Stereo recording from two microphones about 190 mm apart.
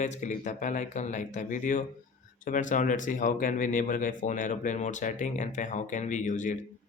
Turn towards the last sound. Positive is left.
turn(degrees=40)  # may be behind; listen again after turning